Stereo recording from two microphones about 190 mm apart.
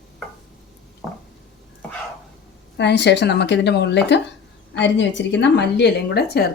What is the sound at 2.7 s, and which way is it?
A woman's voice, 65° left (ahead or behind).